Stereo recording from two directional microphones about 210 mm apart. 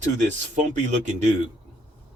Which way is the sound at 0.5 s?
35° right (ahead or behind).